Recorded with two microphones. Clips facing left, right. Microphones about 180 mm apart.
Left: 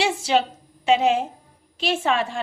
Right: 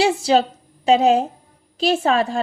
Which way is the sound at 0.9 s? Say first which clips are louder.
Right 4 dB; 40° right (ahead or behind).